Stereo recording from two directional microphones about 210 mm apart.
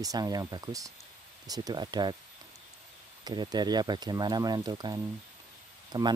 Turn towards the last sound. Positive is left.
turn(degrees=-20)  # may be behind; listen again after turning